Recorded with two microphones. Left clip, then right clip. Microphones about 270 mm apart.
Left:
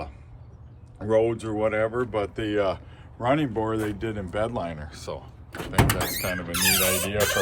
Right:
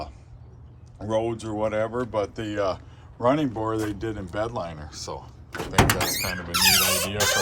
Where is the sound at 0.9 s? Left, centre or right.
Centre.